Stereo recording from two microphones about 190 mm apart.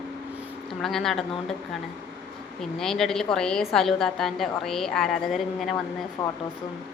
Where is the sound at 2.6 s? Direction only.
Centre (ahead or behind).